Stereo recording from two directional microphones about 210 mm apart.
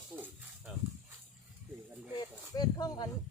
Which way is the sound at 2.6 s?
20° left (ahead or behind).